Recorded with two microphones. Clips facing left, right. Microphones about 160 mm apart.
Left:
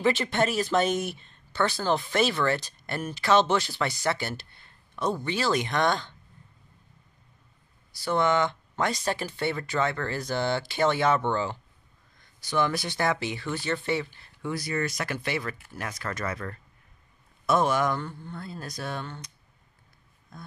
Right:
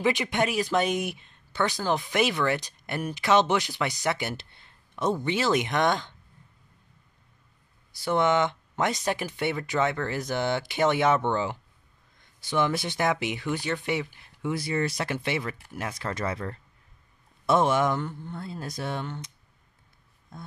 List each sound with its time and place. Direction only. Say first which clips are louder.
0.0 s speech: left 1 dB; 15° right (ahead or behind)
7.9 s speech: right 1 dB; 20° right (ahead or behind)